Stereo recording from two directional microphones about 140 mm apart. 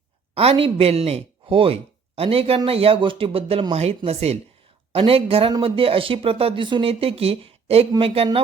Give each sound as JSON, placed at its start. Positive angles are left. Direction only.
{"t": 0.3, "sound": "speech", "side_deg": -40}